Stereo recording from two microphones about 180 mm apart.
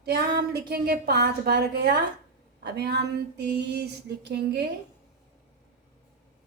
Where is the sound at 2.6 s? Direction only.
65° right (ahead or behind).